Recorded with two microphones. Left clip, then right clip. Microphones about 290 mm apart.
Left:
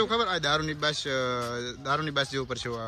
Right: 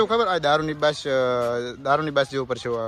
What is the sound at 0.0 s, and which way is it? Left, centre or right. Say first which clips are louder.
Speech: right 6 dB; centre.